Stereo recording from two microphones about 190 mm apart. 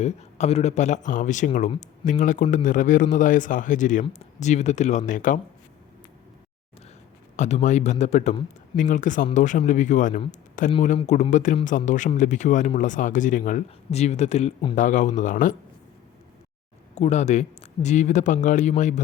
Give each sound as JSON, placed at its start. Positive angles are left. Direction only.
{"t": 0.0, "sound": "a man's voice", "side_deg": 35}
{"t": 7.3, "sound": "a man's voice", "side_deg": 40}
{"t": 14.8, "sound": "a man's voice", "side_deg": 40}
{"t": 16.9, "sound": "speech", "side_deg": 35}